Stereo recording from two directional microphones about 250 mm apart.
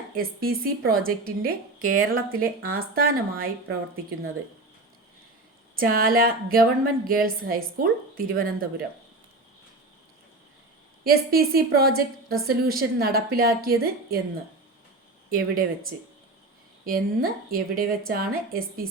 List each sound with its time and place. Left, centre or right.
0.4 s a woman's voice: right
5.7 s a woman's voice: right
11.0 s a woman's voice: right
15.3 s a woman's voice: right